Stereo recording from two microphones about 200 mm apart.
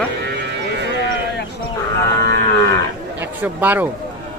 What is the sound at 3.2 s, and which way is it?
Speech, 10° right (ahead or behind).